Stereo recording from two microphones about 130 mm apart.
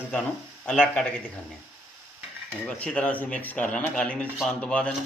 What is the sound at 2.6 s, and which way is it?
Speech, 10° left (ahead or behind).